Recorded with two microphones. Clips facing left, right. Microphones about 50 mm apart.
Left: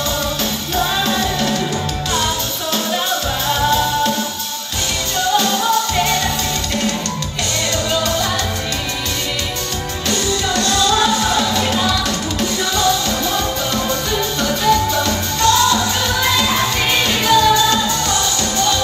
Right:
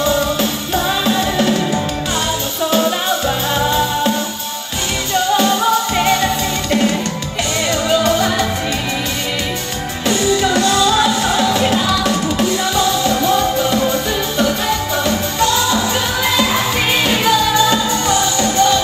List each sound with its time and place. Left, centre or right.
1.0 s music: centre
6.7 s music: centre
10.0 s music: centre